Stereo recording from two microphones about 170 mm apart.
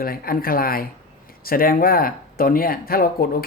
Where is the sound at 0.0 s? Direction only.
60° left (ahead or behind).